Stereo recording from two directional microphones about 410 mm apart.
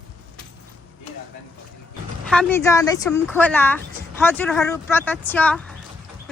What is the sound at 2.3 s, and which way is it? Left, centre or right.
Speech, centre.